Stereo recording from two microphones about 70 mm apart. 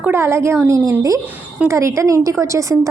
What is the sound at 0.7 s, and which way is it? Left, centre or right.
Speech, right.